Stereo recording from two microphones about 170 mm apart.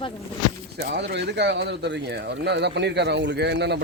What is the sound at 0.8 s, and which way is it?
Speech, 90° right.